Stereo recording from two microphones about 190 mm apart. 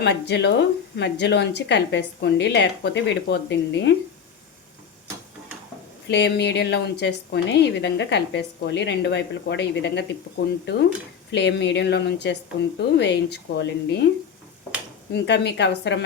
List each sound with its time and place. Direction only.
0.0 s a woman's voice: 65° left (ahead or behind)
6.1 s a woman's voice: 60° left (ahead or behind)
15.1 s a woman's voice: 65° left (ahead or behind)